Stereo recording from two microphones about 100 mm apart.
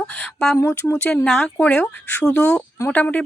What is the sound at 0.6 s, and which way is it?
Speech, 25° left (ahead or behind).